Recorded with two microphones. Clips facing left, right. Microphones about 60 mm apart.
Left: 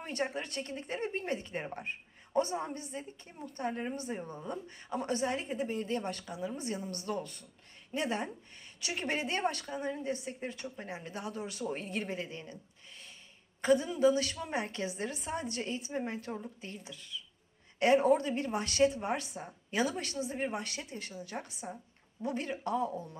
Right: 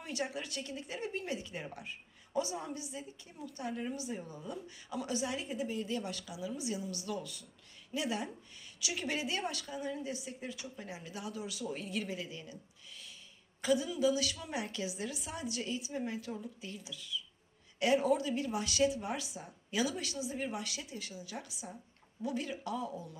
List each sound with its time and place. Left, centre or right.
0.0 s a woman's voice: left
13.6 s a woman's voice: left